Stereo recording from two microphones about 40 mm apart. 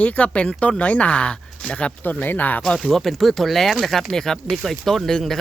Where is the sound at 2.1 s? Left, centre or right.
Left.